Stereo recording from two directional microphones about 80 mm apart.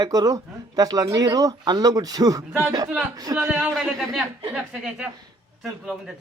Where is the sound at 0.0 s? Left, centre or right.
Right.